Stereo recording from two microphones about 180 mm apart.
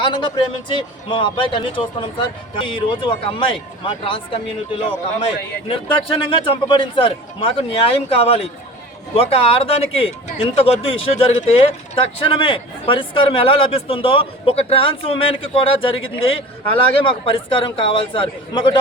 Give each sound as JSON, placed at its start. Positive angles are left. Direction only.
{"t": 0.0, "sound": "a man's voice", "side_deg": 25}